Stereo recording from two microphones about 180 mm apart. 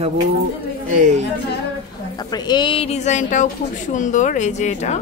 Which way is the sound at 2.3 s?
25° left (ahead or behind).